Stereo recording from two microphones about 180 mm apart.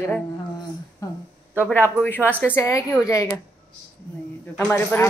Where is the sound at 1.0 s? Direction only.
20° left (ahead or behind).